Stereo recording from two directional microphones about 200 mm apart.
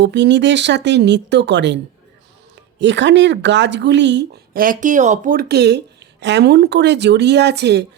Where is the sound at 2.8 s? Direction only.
65° right (ahead or behind).